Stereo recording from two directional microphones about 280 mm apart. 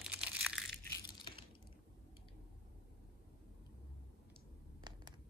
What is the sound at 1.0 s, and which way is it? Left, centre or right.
Crushing, centre.